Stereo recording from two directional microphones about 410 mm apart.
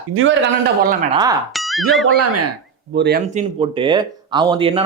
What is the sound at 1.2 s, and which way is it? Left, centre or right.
Speech, centre.